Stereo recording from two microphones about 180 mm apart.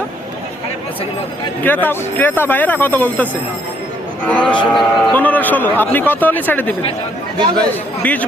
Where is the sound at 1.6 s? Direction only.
10° left (ahead or behind).